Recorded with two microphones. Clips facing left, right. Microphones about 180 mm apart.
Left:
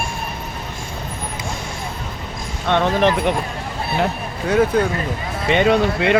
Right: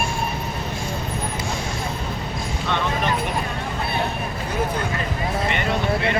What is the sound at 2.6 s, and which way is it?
Speech, 75° left (ahead or behind).